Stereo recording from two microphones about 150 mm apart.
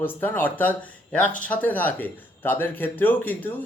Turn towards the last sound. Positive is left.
turn(degrees=10)  # may be behind; listen again after turning